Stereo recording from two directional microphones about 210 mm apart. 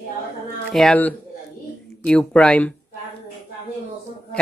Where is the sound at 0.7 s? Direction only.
5° left (ahead or behind).